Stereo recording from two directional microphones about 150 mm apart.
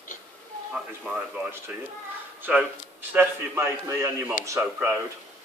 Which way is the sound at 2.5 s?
5° right (ahead or behind).